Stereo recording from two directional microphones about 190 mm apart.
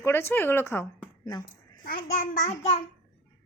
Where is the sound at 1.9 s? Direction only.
45° left (ahead or behind).